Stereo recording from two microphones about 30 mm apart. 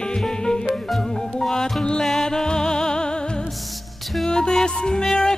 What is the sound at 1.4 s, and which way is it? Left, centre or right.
Music, centre.